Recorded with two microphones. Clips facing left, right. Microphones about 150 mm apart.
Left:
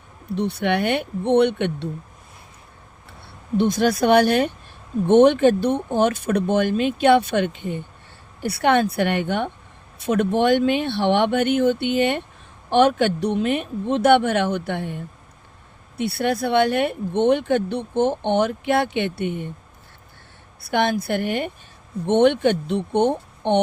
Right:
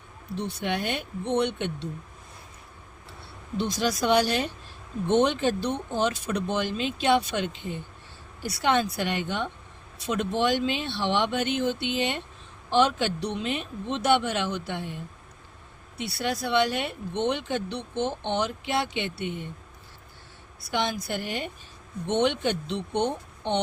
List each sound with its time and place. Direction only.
0.3 s speech: 65° left (ahead or behind)
3.6 s speech: 55° left (ahead or behind)
20.6 s speech: 55° left (ahead or behind)